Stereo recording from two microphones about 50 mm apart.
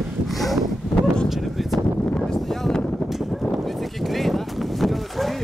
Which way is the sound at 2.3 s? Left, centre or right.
Centre.